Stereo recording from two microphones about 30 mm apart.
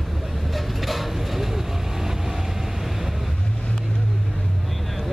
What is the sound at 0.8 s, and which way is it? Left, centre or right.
Vehicle, centre.